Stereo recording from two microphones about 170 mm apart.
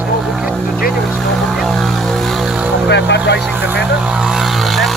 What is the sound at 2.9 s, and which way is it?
Speech, 90° left.